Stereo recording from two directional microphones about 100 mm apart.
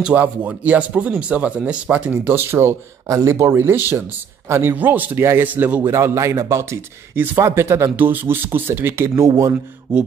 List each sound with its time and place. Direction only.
0.0 s speech: 15° right (ahead or behind)
5.9 s speech: 30° right (ahead or behind)